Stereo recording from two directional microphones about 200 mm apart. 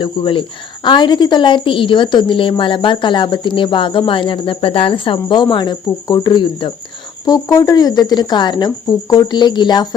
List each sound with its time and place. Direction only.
0.0 s a woman's voice: 25° left (ahead or behind)